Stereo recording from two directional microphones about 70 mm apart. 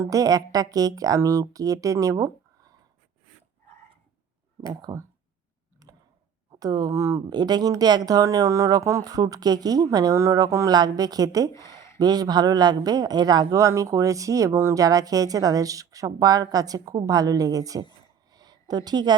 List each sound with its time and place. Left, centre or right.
0.1 s speech: right
4.6 s speech: right
5.8 s clicking: right
6.5 s speech: right
6.9 s speech: right
7.3 s speech: right
7.8 s speech: right
9.0 s speech: right
10.7 s a man's voice: right
13.5 s speech: right
14.5 s speech: right
14.8 s speech: right
18.3 s a sound: right